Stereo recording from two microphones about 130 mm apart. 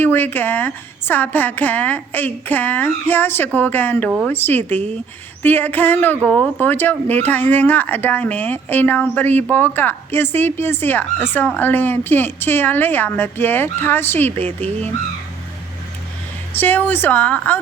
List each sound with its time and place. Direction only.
0.0 s speech: 15° left (ahead or behind)
16.6 s speech: 15° left (ahead or behind)